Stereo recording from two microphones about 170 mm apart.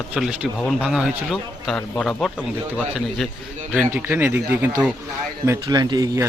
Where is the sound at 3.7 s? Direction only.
10° right (ahead or behind).